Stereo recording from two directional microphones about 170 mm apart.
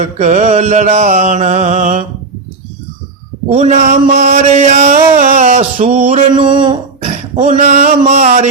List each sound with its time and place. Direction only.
0.0 s mantra: 45° right (ahead or behind)
3.5 s mantra: 45° right (ahead or behind)
6.1 s a sound: 30° right (ahead or behind)
7.0 s speech: 45° right (ahead or behind)